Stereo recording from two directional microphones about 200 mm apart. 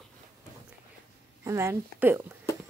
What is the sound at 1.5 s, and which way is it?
Speech, 15° right (ahead or behind).